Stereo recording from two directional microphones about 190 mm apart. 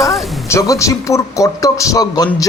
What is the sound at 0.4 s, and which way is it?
A man's voice, 15° left (ahead or behind).